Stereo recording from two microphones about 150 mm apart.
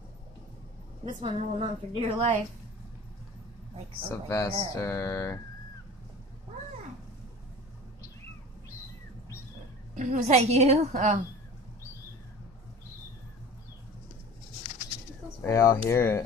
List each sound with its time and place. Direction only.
1.0 s a woman's voice: 35° right (ahead or behind)
4.1 s speech: 20° left (ahead or behind)
9.9 s a woman's voice: 50° right (ahead or behind)
15.2 s speech: 20° left (ahead or behind)